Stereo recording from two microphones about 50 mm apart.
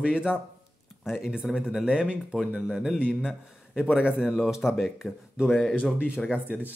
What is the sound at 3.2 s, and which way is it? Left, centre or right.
A man's voice, centre.